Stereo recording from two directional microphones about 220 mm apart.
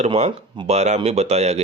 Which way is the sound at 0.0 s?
25° right (ahead or behind).